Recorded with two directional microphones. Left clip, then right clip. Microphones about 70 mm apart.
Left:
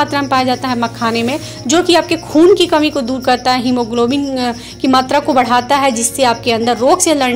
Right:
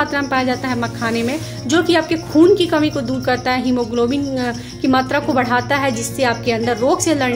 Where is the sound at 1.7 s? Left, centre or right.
Left.